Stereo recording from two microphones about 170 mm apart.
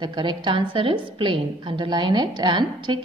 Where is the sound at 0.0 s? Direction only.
30° right (ahead or behind).